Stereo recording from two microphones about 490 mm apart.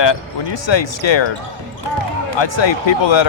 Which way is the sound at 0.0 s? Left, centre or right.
Left.